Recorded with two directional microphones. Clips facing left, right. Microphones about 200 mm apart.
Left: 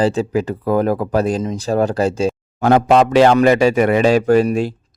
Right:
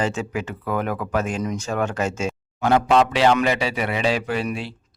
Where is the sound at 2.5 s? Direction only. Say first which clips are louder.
Left 5 dB; 45° left (ahead or behind).